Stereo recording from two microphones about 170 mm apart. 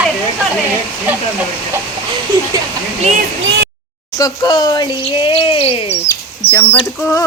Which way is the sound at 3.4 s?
90° right.